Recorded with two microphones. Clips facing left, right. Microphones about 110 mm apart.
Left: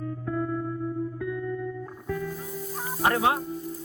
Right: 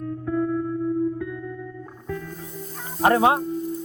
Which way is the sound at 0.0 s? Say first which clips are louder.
Right 5 dB; centre (ahead or behind).